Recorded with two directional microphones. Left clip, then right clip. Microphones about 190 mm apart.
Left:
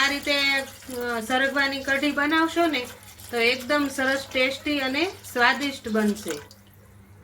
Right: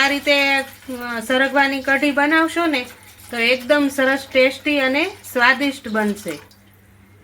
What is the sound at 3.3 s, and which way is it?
Speech, 55° right (ahead or behind).